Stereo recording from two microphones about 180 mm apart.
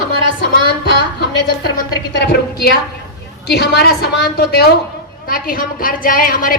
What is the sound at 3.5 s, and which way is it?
A woman's voice, 65° left (ahead or behind).